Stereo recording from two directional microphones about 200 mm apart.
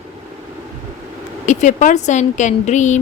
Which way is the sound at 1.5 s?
40° left (ahead or behind).